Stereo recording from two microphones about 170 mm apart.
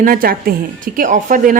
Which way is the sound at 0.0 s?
55° right (ahead or behind).